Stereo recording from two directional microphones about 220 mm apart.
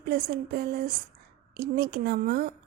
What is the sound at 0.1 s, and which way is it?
Speech, 45° right (ahead or behind).